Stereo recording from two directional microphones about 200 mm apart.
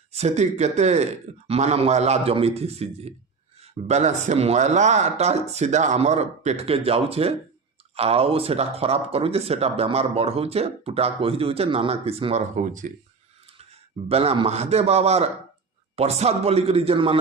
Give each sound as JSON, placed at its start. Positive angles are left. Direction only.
{"t": 0.1, "sound": "a man's voice", "side_deg": -35}